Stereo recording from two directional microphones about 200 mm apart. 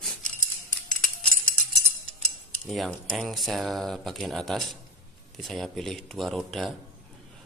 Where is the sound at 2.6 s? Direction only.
Centre (ahead or behind).